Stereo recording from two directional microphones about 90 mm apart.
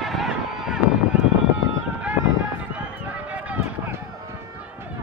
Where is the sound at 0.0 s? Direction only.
Centre (ahead or behind).